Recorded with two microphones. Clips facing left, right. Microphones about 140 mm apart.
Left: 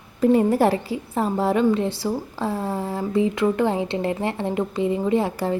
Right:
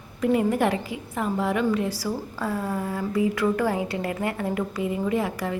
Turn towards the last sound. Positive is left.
turn(degrees=30)  # may be behind; listen again after turning